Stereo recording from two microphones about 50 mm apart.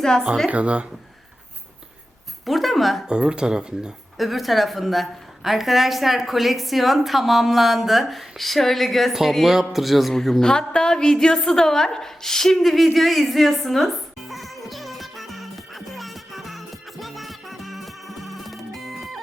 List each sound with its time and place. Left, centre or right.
0.0 s speech: centre
0.5 s speech: right
2.5 s speech: centre
3.1 s speech: centre
4.2 s a woman's voice: centre
10.4 s a sound: centre